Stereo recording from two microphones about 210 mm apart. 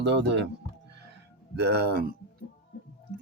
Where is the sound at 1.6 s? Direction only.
50° right (ahead or behind).